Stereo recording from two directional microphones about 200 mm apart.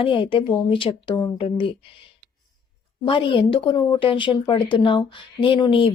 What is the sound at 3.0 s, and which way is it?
A woman's voice, 25° left (ahead or behind).